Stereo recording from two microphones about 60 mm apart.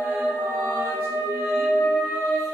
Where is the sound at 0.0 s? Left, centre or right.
Right.